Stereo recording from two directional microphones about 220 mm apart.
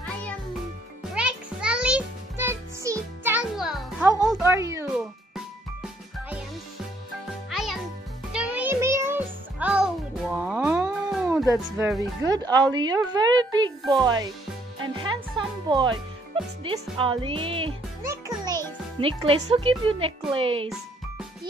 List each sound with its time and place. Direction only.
1.1 s music: 5° right (ahead or behind)
3.5 s music: centre (ahead or behind)
4.3 s a sound: 10° right (ahead or behind)
4.8 s music: 5° right (ahead or behind)
7.4 s music: centre (ahead or behind)
11.5 s speech: centre (ahead or behind)
12.0 s a woman's voice: 20° right (ahead or behind)
15.3 s music: 20° right (ahead or behind)
16.6 s a woman's voice: 25° right (ahead or behind)
18.0 s music: 15° right (ahead or behind)
18.9 s a woman's voice: 25° right (ahead or behind)